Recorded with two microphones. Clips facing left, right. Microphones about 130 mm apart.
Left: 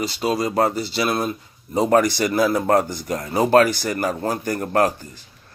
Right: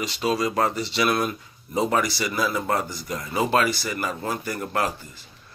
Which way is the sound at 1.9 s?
50° left (ahead or behind).